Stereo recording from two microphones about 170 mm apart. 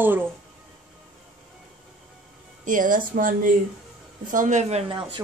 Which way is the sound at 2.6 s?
50° right (ahead or behind).